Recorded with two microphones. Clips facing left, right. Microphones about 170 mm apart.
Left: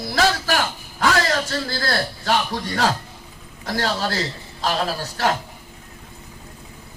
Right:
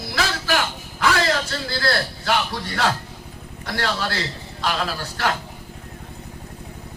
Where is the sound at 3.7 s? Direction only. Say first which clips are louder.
Left 2 dB; 35° left (ahead or behind).